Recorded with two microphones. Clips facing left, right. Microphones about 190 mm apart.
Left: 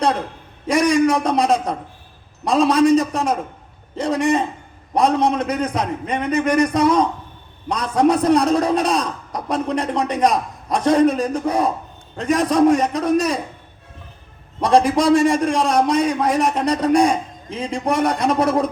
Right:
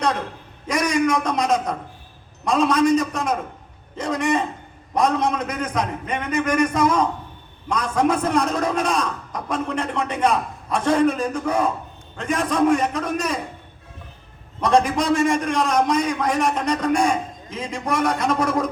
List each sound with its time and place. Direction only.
0.7 s a man's voice: 35° left (ahead or behind)
14.6 s a man's voice: 35° left (ahead or behind)